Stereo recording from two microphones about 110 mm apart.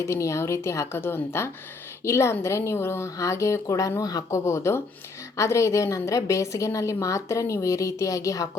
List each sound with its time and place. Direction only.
0.0 s a woman's voice: 25° left (ahead or behind)